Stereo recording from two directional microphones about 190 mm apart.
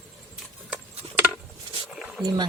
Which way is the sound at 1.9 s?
Centre (ahead or behind).